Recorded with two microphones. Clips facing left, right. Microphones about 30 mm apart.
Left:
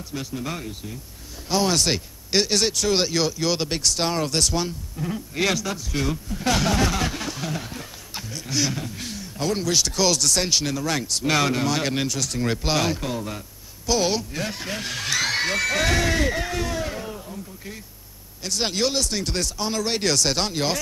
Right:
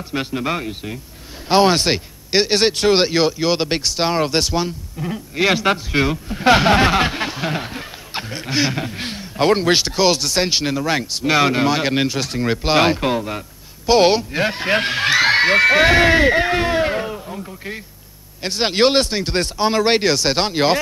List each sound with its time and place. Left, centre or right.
0.1 s speech: right
5.5 s speech: right
12.8 s a man's voice: right
17.3 s a sound: right
18.4 s speech: right
18.8 s speech: right
19.0 s speech: right
20.0 s speech: right